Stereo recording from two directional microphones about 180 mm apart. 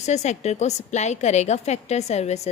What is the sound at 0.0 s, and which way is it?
A woman's voice, 40° left (ahead or behind).